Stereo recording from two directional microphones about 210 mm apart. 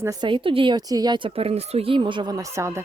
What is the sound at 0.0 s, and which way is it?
Speech, 20° right (ahead or behind).